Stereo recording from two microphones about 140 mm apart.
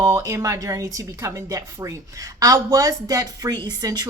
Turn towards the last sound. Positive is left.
turn(degrees=-30)  # may be behind; listen again after turning